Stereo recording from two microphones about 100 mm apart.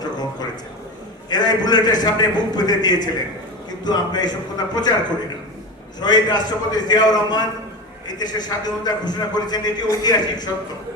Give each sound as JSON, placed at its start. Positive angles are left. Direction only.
{"t": 1.3, "sound": "a man's voice", "side_deg": 45}
{"t": 6.0, "sound": "a man's voice", "side_deg": 45}